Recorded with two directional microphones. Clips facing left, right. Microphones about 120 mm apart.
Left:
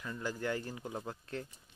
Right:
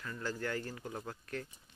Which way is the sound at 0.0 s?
15° left (ahead or behind).